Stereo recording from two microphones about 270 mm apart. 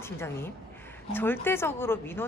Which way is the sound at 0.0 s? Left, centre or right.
Centre.